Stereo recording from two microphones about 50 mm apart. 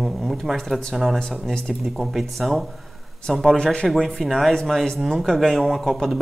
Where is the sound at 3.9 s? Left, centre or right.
Centre.